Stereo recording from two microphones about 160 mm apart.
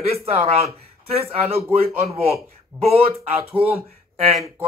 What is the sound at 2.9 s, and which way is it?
A man's voice, 40° right (ahead or behind).